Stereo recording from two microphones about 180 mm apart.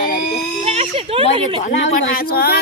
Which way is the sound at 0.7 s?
35° right (ahead or behind).